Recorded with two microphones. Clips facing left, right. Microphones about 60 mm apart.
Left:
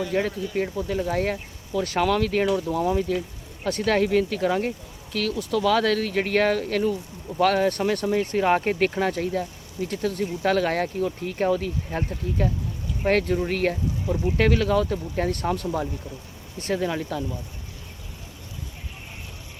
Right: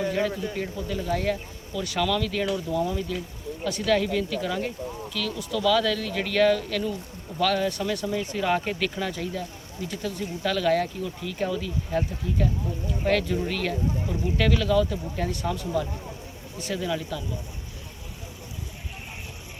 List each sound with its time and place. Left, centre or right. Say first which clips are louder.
0.1 s speech: left 1 dB; left